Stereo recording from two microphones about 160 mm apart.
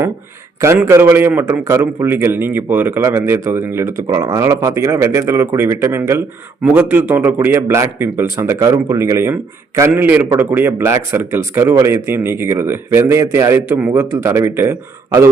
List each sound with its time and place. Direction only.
0.9 s a man's voice: 15° right (ahead or behind)